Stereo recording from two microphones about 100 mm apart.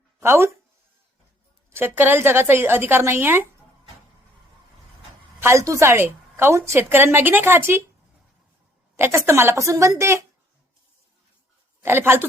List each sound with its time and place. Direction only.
0.2 s speech: 25° right (ahead or behind)
1.7 s a woman's voice: 20° right (ahead or behind)
5.4 s a woman's voice: 30° right (ahead or behind)
9.0 s a woman's voice: 25° right (ahead or behind)
11.8 s a woman's voice: 20° right (ahead or behind)